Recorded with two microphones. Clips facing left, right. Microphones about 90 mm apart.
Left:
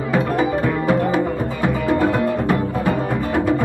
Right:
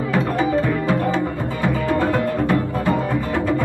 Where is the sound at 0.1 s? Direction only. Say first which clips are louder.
Left 1 dB; 15° left (ahead or behind).